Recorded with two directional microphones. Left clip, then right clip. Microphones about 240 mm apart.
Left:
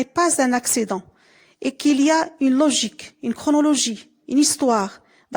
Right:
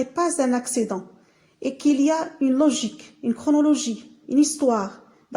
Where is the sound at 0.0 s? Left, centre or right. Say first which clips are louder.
Left 3 dB; left.